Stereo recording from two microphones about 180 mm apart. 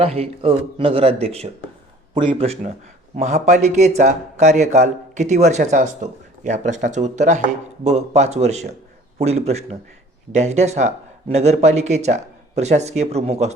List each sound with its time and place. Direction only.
0.0 s speech: 35° right (ahead or behind)